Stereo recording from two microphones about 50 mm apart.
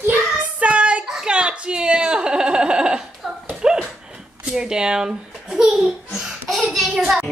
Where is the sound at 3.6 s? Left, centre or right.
Centre.